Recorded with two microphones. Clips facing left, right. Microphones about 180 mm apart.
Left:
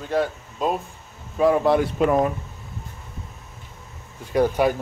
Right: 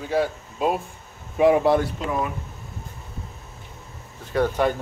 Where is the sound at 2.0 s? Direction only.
55° left (ahead or behind).